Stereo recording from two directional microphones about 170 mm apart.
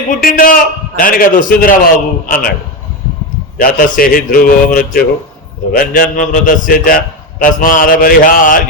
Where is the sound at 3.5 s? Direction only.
55° left (ahead or behind).